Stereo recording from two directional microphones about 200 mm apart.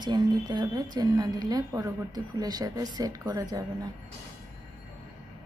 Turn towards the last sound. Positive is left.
turn(degrees=-15)  # may be behind; listen again after turning